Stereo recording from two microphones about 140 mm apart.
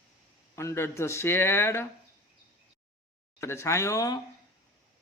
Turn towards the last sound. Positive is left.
turn(degrees=25)  # may be behind; listen again after turning